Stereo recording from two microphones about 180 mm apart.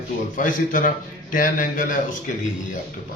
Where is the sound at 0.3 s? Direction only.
50° left (ahead or behind).